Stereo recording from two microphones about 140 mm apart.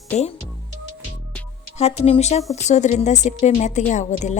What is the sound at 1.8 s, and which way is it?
A woman's voice, 50° left (ahead or behind).